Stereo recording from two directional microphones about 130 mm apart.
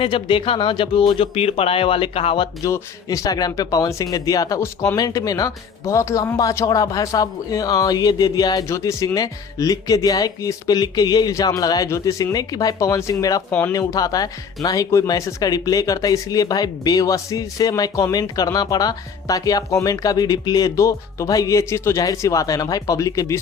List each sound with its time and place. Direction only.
0.0 s speech: 40° left (ahead or behind)
2.6 s speech: 25° left (ahead or behind)
13.5 s speech: 10° left (ahead or behind)
13.7 s speech: 30° left (ahead or behind)